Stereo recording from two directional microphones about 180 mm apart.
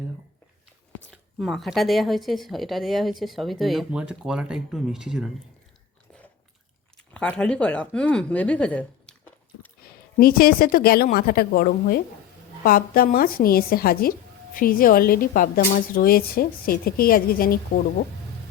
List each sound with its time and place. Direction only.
1.4 s a woman's voice: centre (ahead or behind)
6.9 s speech: 5° left (ahead or behind)
9.8 s a woman's voice: 55° left (ahead or behind)